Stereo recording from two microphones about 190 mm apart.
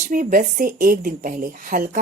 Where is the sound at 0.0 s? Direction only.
45° right (ahead or behind).